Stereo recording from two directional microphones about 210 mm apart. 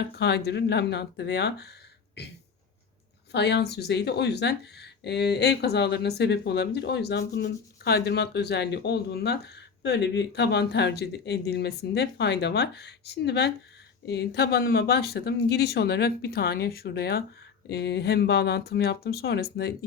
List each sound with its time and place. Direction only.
0.2 s speech: 55° left (ahead or behind)
3.3 s speech: 55° left (ahead or behind)